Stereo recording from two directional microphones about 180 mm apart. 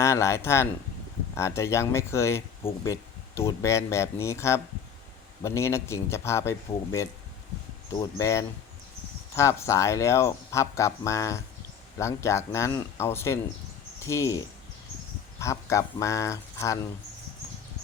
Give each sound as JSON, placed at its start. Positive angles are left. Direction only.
{"t": 0.0, "sound": "speech", "side_deg": 15}